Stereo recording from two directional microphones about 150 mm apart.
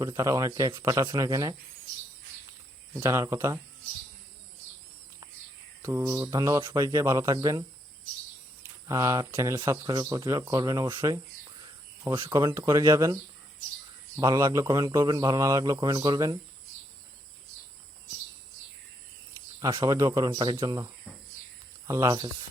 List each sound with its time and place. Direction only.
0.0 s speech: 25° right (ahead or behind)
3.0 s speech: 20° right (ahead or behind)
5.8 s speech: 20° right (ahead or behind)
8.9 s speech: 20° right (ahead or behind)
11.6 s cricket: 20° right (ahead or behind)
12.3 s speech: 20° right (ahead or behind)
14.2 s speech: 25° right (ahead or behind)
19.5 s speech: 25° right (ahead or behind)